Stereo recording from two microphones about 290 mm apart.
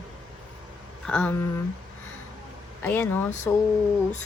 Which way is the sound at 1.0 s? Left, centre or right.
Centre.